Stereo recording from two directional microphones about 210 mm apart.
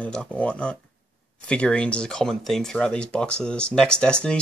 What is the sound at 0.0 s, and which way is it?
Speech, 5° left (ahead or behind).